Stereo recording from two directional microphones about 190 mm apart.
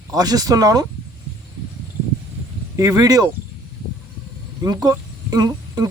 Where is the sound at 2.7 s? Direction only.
20° right (ahead or behind).